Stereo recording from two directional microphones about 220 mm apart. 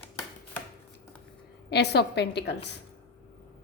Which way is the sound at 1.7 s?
50° left (ahead or behind).